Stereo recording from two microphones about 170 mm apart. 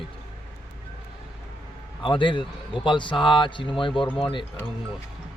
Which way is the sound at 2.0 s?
30° left (ahead or behind).